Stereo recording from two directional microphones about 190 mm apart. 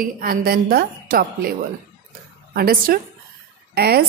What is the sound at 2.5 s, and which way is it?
A woman's voice, 50° right (ahead or behind).